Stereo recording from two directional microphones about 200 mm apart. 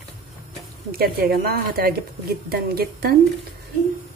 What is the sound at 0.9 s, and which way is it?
A woman's voice, 50° right (ahead or behind).